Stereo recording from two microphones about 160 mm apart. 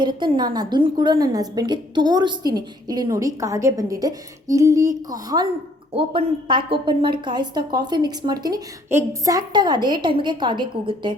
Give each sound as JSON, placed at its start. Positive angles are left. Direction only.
{"t": 0.0, "sound": "a woman's voice", "side_deg": -30}
{"t": 5.9, "sound": "a woman's voice", "side_deg": -35}